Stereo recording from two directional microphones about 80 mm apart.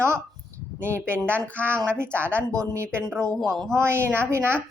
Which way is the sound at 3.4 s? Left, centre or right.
Centre.